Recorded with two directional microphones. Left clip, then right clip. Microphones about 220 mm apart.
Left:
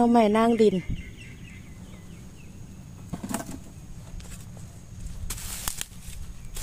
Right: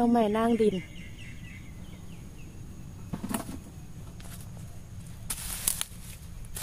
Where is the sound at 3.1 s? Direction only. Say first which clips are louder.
Left 2 dB; 40° left (ahead or behind).